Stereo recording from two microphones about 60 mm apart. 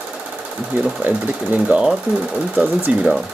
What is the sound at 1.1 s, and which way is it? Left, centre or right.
Speech, right.